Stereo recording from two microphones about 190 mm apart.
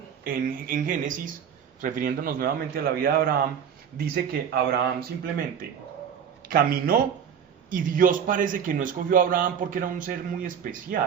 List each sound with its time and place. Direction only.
0.3 s a man's voice: 45° right (ahead or behind)
6.5 s a man's voice: 50° right (ahead or behind)